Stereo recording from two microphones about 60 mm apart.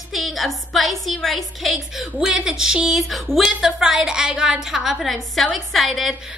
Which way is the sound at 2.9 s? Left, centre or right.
Centre.